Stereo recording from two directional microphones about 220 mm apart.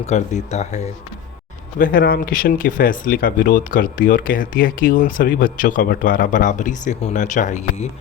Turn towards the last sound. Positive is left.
turn(degrees=30)  # may be behind; listen again after turning